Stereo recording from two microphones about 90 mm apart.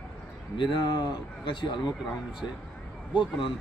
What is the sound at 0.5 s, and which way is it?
Speech, 60° left (ahead or behind).